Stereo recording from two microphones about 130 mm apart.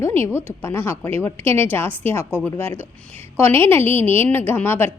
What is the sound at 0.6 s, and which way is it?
A woman's voice, 15° left (ahead or behind).